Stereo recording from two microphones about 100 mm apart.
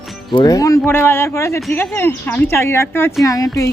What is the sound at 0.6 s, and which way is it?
Speech, 35° left (ahead or behind).